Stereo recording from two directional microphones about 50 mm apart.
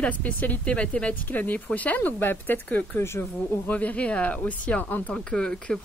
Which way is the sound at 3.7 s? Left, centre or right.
Left.